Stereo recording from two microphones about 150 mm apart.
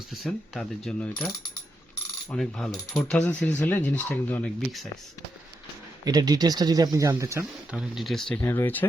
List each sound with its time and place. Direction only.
0.1 s speech: 5° left (ahead or behind)
2.3 s mechanisms: 5° left (ahead or behind)
6.1 s speech: 25° right (ahead or behind)
7.7 s speech: centre (ahead or behind)
8.4 s mechanisms: 15° left (ahead or behind)